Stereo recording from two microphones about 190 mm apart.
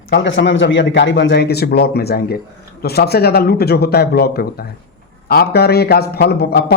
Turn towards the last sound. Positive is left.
turn(degrees=55)  # may be behind; listen again after turning